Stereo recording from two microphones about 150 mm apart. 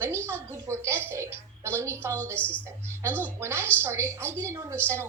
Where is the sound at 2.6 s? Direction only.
15° right (ahead or behind).